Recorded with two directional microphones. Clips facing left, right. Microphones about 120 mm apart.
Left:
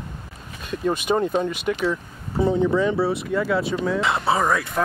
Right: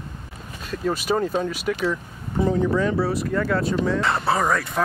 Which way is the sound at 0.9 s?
5° right (ahead or behind).